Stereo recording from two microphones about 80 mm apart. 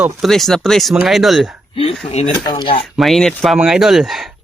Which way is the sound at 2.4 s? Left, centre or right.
Left.